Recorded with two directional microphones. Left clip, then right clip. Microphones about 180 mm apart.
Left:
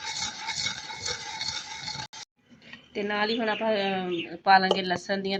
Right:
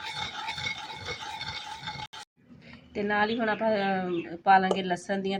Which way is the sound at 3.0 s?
10° left (ahead or behind).